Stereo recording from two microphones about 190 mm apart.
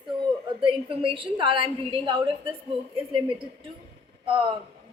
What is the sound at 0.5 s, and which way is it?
A woman's voice, 30° right (ahead or behind).